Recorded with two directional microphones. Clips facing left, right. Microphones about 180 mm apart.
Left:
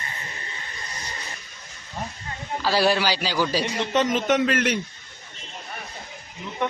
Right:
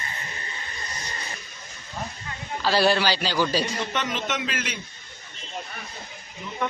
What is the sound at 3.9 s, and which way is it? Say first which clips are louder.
Speech: left 12 dB; 40° left (ahead or behind).